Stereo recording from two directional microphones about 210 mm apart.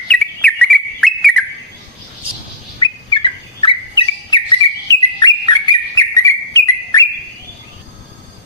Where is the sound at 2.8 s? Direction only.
25° left (ahead or behind).